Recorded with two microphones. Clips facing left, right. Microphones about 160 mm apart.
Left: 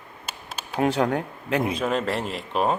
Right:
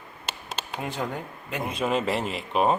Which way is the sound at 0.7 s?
80° left.